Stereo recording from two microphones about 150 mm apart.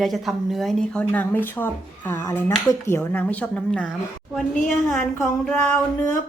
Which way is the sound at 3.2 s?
5° left (ahead or behind).